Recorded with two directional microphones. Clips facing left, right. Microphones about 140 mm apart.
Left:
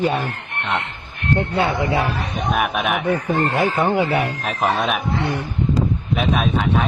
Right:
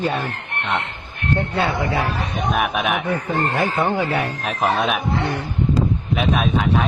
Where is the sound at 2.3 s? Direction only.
Centre (ahead or behind).